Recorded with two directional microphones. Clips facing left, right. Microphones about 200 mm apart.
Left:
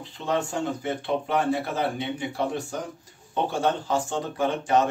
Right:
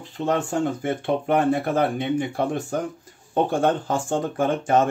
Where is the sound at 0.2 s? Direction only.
50° right (ahead or behind).